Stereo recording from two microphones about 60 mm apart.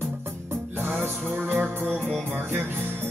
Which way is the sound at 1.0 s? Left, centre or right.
Right.